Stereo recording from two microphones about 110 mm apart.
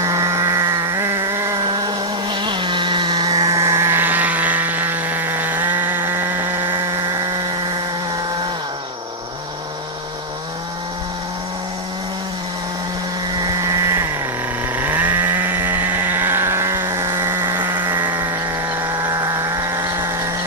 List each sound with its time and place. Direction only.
0.0 s a sound: 30° right (ahead or behind)
1.7 s vehicle: 40° right (ahead or behind); by 6.8 s 25° right (ahead or behind)
13.6 s vehicle: 30° right (ahead or behind)
14.8 s chainsaw: 15° right (ahead or behind)
18.8 s vehicle: 25° right (ahead or behind)